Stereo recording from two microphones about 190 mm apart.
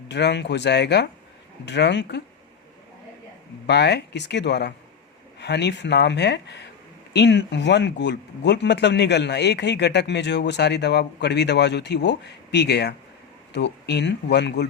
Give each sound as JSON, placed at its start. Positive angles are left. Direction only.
{"t": 0.1, "sound": "speech", "side_deg": 65}
{"t": 3.7, "sound": "speech", "side_deg": 65}